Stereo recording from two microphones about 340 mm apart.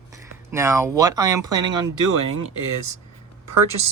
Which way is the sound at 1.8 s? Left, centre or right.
Right.